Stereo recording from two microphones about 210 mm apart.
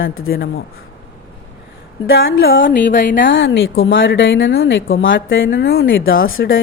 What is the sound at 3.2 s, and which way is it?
Speech, 60° left (ahead or behind).